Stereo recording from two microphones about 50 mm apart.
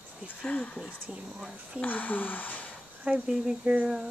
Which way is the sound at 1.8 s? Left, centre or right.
Left.